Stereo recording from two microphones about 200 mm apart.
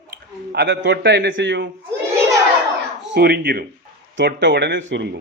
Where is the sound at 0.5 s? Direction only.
65° right (ahead or behind).